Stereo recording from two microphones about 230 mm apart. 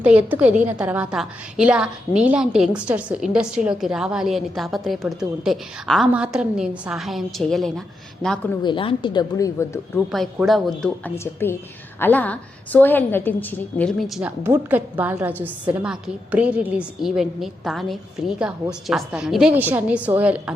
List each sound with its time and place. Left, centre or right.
0.0 s a woman's voice: centre
8.6 s speech: left
10.1 s a woman's voice: centre